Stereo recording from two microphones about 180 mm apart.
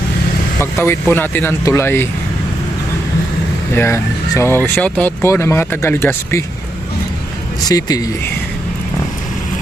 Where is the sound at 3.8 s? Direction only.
15° left (ahead or behind).